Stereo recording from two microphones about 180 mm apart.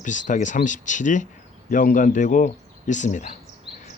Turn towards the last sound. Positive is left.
turn(degrees=45)  # may be behind; listen again after turning